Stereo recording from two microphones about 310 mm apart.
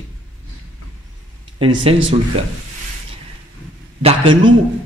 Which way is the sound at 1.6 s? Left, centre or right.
Centre.